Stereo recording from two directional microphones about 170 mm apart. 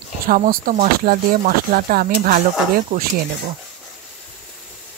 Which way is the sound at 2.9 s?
45° right (ahead or behind).